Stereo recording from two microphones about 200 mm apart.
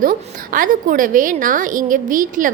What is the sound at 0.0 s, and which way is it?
A woman's voice, 45° right (ahead or behind).